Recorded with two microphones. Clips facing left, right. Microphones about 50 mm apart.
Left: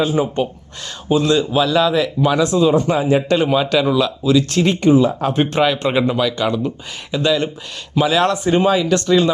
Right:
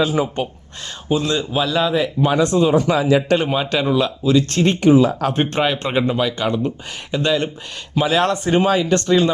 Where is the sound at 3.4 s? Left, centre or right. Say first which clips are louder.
Left 3 dB; right.